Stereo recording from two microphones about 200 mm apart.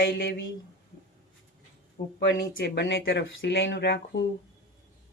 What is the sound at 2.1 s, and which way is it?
Speech, 50° left (ahead or behind).